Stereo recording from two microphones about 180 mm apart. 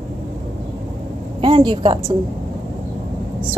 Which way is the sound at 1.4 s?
25° right (ahead or behind).